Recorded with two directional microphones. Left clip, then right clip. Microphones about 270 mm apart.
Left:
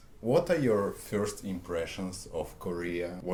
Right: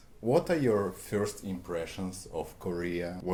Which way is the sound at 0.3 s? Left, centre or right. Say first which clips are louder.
Left 1 dB; right.